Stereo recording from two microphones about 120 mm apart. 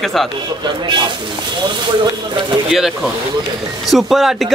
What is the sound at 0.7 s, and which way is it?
Speech, 40° right (ahead or behind).